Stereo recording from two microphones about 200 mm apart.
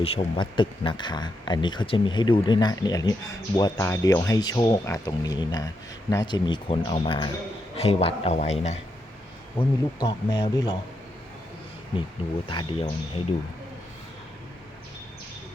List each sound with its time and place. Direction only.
0.0 s speech: 25° left (ahead or behind)
9.6 s speech: 10° left (ahead or behind)
10.0 s speech: 20° left (ahead or behind)
12.5 s speech: 25° left (ahead or behind)